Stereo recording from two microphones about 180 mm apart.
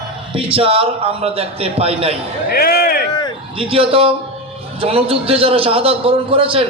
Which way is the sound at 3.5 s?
30° right (ahead or behind).